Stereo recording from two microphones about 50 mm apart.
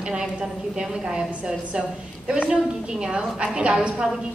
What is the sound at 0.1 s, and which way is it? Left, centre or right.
A woman's voice, centre.